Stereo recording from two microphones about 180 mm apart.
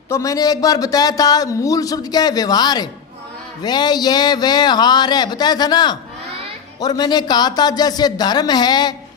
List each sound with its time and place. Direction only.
0.1 s speech: 20° left (ahead or behind)